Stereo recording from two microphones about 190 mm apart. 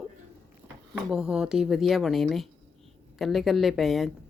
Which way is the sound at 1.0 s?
5° right (ahead or behind).